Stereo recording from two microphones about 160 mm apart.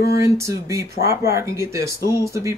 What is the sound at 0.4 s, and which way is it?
Speech, 20° right (ahead or behind).